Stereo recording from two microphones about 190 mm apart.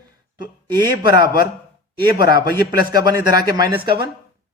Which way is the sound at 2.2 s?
55° left (ahead or behind).